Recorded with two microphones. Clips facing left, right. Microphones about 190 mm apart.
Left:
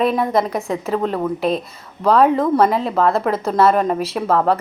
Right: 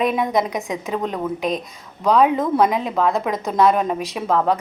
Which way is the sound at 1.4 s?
30° left (ahead or behind).